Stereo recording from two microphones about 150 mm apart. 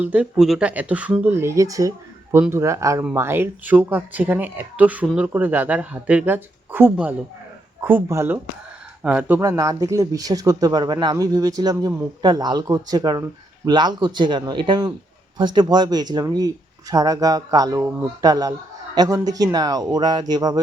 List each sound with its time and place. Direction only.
0.0 s speech: 10° right (ahead or behind)
9.4 s speech: 25° right (ahead or behind)